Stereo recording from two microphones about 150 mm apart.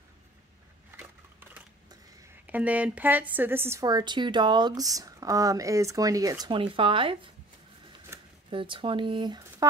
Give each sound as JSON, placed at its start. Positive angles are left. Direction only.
{"t": 0.9, "sound": "crushing", "side_deg": -15}
{"t": 2.4, "sound": "a woman's voice", "side_deg": -10}
{"t": 3.8, "sound": "speech", "side_deg": -30}
{"t": 8.1, "sound": "a sound", "side_deg": -15}
{"t": 8.5, "sound": "speech", "side_deg": -35}